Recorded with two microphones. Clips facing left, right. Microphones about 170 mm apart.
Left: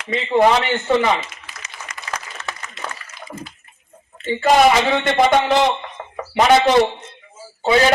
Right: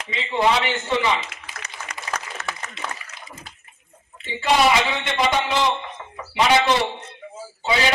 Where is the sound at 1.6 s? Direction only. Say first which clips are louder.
Right 1 dB; 65° right (ahead or behind).